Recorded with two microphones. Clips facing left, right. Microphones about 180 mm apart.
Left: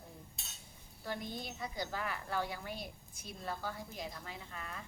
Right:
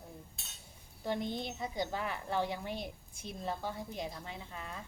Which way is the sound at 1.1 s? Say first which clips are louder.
Right 6 dB; 25° right (ahead or behind).